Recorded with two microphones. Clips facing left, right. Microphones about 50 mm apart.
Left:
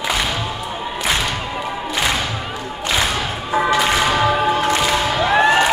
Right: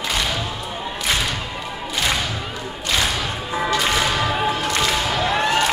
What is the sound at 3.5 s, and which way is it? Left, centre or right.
Whip, left.